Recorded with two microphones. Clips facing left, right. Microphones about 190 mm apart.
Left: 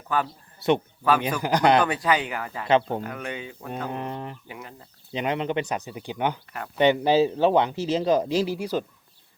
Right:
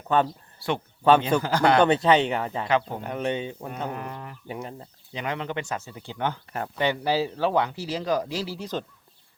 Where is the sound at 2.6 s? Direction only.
25° left (ahead or behind).